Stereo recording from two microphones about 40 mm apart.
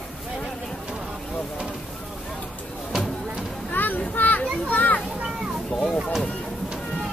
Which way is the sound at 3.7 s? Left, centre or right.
Left.